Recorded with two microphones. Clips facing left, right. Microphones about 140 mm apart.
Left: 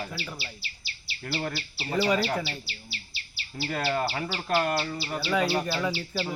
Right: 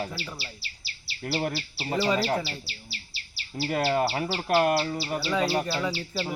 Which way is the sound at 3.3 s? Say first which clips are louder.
Right 3 dB; 35° right (ahead or behind).